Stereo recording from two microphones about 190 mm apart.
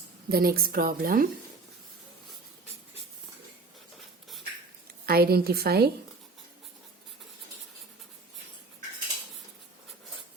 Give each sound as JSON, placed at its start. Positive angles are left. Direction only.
{"t": 0.3, "sound": "speech", "side_deg": -50}
{"t": 5.0, "sound": "a woman's voice", "side_deg": -55}